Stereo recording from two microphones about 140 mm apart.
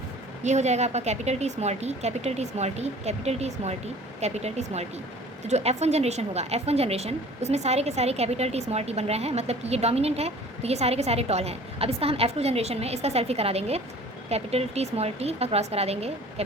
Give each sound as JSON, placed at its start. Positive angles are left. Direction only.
{"t": 0.4, "sound": "a woman's voice", "side_deg": -55}